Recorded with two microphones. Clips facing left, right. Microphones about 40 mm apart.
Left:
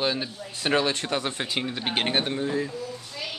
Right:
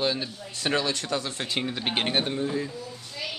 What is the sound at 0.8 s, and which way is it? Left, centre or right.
Speech, left.